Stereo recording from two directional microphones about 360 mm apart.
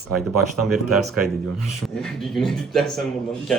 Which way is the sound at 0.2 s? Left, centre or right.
Centre.